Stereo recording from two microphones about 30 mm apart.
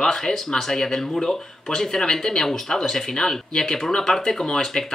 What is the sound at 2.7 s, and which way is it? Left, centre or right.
Speech, centre.